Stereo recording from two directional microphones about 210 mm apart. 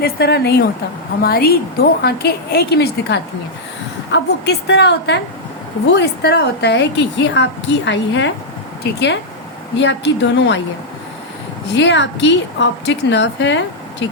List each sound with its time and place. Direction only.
0.0 s a woman's voice: 50° left (ahead or behind)
11.7 s a woman's voice: 60° left (ahead or behind)